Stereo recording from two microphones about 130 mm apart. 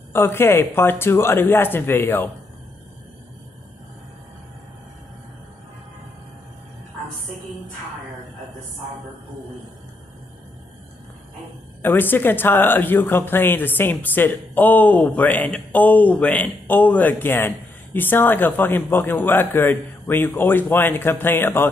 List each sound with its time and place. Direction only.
0.1 s speech: 20° left (ahead or behind)
11.8 s speech: 15° left (ahead or behind)